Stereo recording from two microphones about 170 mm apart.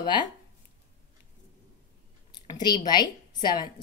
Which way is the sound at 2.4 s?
25° left (ahead or behind).